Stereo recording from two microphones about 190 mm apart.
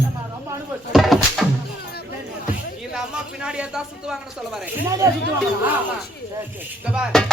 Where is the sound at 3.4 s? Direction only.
5° right (ahead or behind).